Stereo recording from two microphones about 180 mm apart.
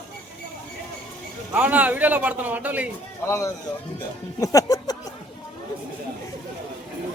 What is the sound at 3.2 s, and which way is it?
Speech, 15° left (ahead or behind).